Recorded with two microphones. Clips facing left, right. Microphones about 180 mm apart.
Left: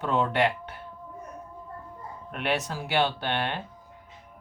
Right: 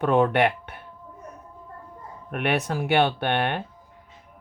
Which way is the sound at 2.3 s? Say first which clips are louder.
Right 4 dB; 60° right (ahead or behind).